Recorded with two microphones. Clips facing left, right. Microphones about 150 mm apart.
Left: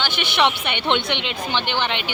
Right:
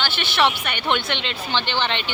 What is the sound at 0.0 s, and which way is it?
A woman's voice, 15° left (ahead or behind).